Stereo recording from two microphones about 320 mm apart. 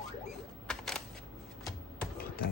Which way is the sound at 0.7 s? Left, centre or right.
Centre.